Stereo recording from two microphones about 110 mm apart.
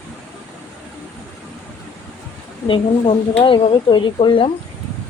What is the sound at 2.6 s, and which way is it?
Speech, 50° left (ahead or behind).